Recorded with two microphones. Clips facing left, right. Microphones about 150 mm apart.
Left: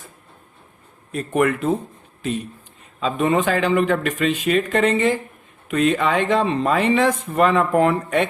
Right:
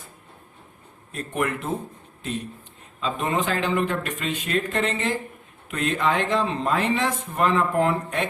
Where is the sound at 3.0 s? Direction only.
85° left.